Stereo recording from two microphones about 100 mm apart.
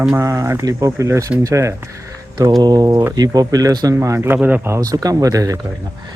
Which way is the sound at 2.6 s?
40° right (ahead or behind).